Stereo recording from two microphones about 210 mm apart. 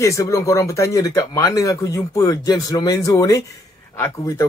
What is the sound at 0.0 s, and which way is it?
Speech, 15° left (ahead or behind).